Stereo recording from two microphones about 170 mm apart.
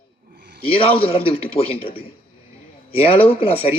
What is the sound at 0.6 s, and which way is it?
A man's voice, 35° left (ahead or behind).